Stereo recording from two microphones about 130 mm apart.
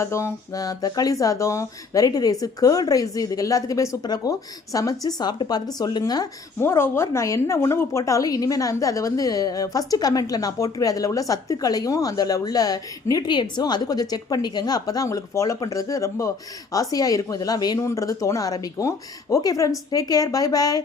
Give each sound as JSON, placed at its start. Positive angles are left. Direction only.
{"t": 0.0, "sound": "a woman's voice", "side_deg": 20}
{"t": 6.6, "sound": "a woman's voice", "side_deg": 20}